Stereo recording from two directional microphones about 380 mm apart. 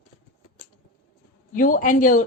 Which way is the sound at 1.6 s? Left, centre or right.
Left.